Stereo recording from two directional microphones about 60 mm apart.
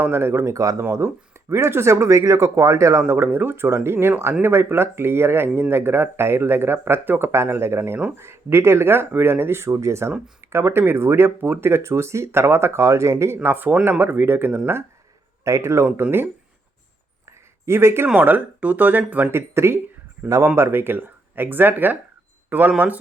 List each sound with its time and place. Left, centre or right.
0.0 s speech: right
0.5 s speech: right
0.8 s speech: right
3.1 s speech: right
7.3 s speech: right
13.4 s speech: right
15.4 s speech: right
17.2 s a sound: right
18.1 s speech: right
19.3 s speech: right
20.6 s speech: right